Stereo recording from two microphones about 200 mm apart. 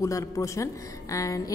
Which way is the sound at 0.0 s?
15° left (ahead or behind).